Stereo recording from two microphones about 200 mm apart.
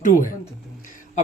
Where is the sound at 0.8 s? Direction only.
40° left (ahead or behind).